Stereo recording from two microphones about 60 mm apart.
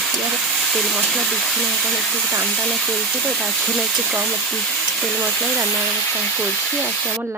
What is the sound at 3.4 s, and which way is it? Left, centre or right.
Speech, centre.